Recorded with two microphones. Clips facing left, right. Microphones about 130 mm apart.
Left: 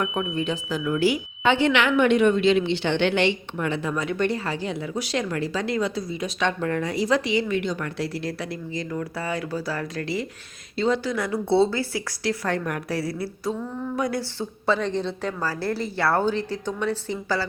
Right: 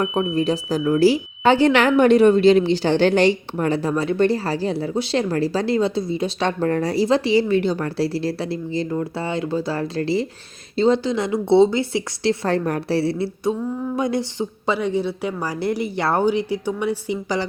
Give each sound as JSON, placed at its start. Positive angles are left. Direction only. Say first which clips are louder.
{"t": 0.0, "sound": "speech", "louder": "right 6 dB", "side_deg": -35}